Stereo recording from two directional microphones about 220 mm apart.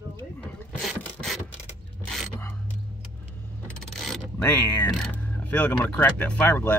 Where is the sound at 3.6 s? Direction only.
Centre (ahead or behind).